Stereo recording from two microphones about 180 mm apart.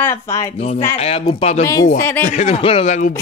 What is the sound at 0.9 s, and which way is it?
A man's voice, 35° left (ahead or behind).